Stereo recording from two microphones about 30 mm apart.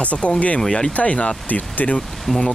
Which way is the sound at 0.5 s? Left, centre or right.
Centre.